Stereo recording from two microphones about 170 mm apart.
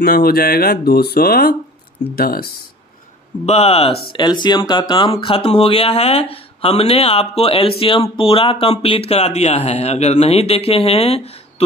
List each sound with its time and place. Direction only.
0.0 s speech: 60° left (ahead or behind)
3.4 s speech: 40° left (ahead or behind)